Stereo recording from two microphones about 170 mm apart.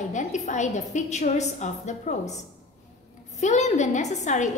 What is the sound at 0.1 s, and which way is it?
A woman's voice, 45° left (ahead or behind).